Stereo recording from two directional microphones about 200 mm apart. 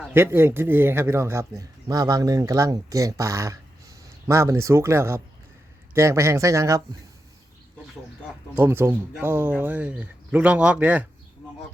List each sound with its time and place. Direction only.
0.1 s speech: 10° right (ahead or behind)
8.5 s speech: 10° right (ahead or behind)